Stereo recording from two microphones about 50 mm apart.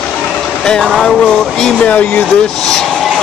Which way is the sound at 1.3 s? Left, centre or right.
Left.